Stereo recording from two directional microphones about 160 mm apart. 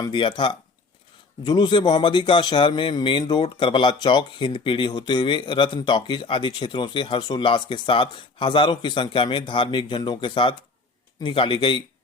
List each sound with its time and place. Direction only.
0.0 s a man's voice: 30° left (ahead or behind)